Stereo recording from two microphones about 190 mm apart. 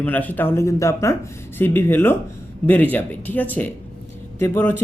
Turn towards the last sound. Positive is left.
turn(degrees=10)  # may be behind; listen again after turning